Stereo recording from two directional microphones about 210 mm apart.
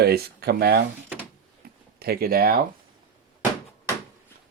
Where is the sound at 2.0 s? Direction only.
45° right (ahead or behind).